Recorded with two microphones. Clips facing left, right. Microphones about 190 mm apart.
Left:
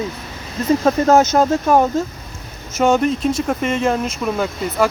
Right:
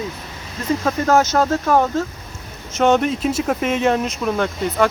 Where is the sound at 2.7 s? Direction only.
5° left (ahead or behind).